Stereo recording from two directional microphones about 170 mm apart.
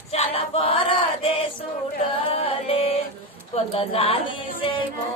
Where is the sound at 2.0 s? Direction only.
35° left (ahead or behind).